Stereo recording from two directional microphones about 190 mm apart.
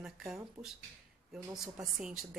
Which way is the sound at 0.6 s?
15° right (ahead or behind).